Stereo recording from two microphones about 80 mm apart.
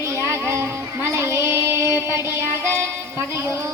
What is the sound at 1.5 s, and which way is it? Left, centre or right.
Music, right.